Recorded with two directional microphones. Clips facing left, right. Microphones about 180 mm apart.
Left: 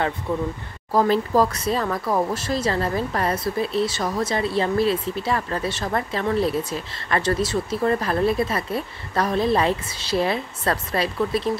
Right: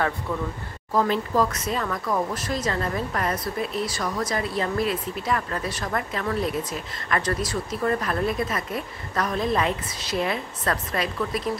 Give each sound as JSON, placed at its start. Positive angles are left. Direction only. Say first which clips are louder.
{"t": 0.3, "sound": "speech", "louder": "left 4 dB", "side_deg": 25}
{"t": 0.9, "sound": "speech", "louder": "left 4 dB", "side_deg": 35}